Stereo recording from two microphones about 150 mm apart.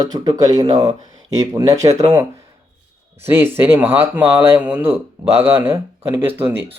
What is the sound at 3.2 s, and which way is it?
Speech, 15° right (ahead or behind).